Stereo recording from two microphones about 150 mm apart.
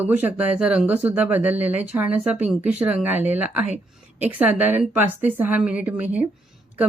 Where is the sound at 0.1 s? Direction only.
10° right (ahead or behind).